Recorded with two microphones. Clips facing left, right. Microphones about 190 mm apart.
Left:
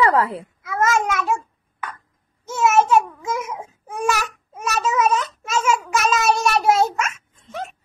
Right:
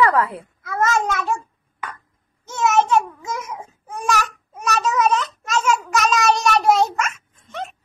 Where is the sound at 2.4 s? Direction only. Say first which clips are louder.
Left 1 dB; 5° left (ahead or behind).